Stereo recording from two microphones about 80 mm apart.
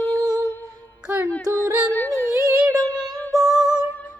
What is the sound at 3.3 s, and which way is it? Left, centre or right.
Music, right.